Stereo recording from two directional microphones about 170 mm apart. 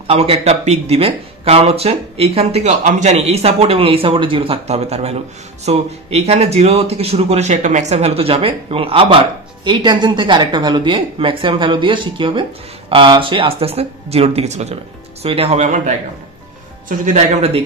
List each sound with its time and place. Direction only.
0.0 s speech: 35° right (ahead or behind)
16.9 s speech: 45° right (ahead or behind)